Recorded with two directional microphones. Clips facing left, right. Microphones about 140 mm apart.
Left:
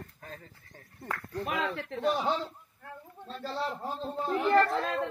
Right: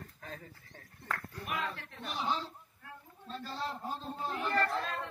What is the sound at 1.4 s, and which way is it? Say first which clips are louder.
Speech: left 9 dB; 85° left.